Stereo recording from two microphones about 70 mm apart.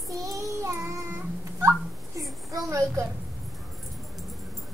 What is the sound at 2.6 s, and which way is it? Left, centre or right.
Speech, right.